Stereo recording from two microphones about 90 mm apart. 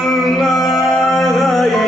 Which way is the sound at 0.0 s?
Centre (ahead or behind).